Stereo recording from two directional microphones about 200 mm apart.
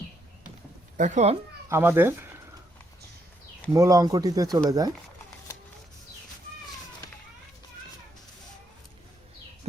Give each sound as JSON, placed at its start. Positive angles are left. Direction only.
{"t": 0.9, "sound": "speech", "side_deg": -35}
{"t": 1.7, "sound": "speech", "side_deg": -10}
{"t": 3.7, "sound": "speech", "side_deg": -15}